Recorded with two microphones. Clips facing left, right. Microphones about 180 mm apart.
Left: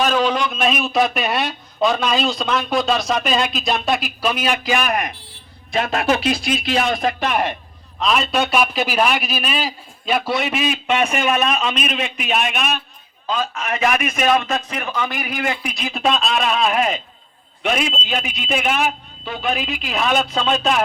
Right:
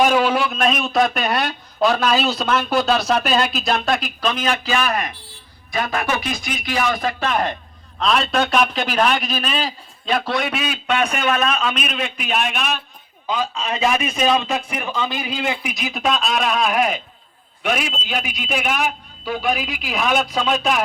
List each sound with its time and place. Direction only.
0.0 s a man's voice: 10° right (ahead or behind); by 12.7 s 5° left (ahead or behind)
13.2 s a man's voice: 10° right (ahead or behind)
15.3 s a man's voice: 10° right (ahead or behind)